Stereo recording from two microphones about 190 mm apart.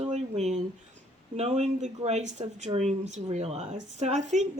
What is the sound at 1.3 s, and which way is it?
Speech, 35° right (ahead or behind).